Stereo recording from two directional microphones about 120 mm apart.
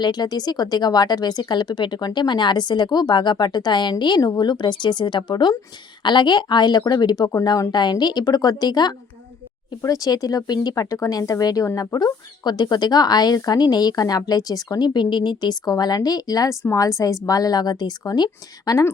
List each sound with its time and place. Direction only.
0.0 s speech: 35° left (ahead or behind)